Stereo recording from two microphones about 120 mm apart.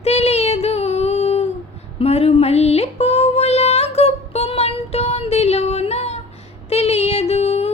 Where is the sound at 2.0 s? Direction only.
60° left (ahead or behind).